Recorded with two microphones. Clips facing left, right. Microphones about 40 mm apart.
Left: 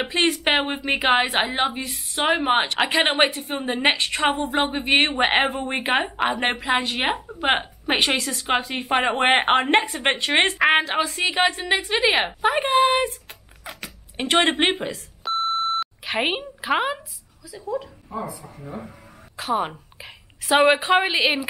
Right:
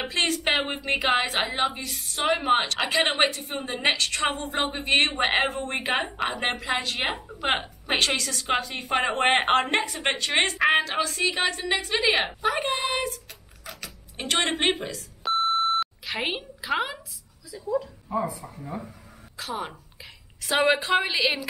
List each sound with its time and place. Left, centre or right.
0.0 s a woman's voice: left
7.3 s a woman's voice: centre
12.4 s a woman's voice: left
14.1 s a woman's voice: left
15.2 s beep: centre
16.0 s speech: left
17.5 s a woman's voice: centre
19.3 s a sound: left
20.7 s a woman's voice: centre